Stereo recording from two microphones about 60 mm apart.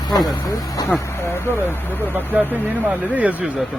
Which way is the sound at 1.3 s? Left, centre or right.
Left.